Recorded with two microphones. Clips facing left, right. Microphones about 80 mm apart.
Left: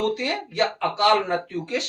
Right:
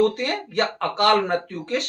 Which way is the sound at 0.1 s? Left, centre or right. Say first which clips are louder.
Even; right.